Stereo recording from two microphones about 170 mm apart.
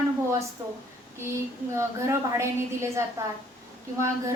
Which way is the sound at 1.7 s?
15° right (ahead or behind).